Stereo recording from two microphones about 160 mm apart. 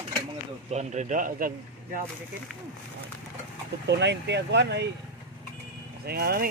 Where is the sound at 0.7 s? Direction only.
45° right (ahead or behind).